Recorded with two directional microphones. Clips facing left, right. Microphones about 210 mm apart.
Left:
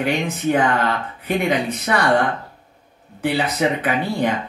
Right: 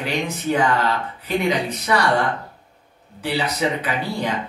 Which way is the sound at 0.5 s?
55° left (ahead or behind).